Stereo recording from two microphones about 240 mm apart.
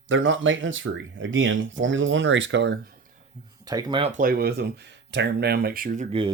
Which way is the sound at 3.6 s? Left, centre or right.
Centre.